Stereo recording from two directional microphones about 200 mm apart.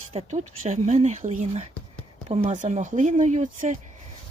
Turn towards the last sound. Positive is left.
turn(degrees=-40)  # may be behind; listen again after turning